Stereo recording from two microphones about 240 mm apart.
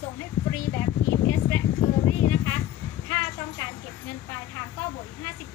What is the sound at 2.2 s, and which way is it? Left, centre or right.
A woman's voice, centre.